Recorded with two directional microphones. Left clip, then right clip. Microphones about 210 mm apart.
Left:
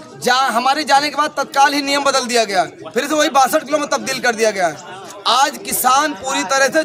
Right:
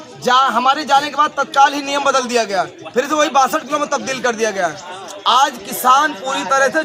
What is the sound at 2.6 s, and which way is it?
A man's voice, 30° left (ahead or behind).